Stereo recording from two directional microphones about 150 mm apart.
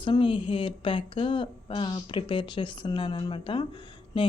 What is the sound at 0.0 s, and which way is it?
Speech, 35° left (ahead or behind).